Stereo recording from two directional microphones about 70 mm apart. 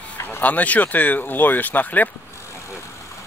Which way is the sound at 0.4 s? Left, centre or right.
Left.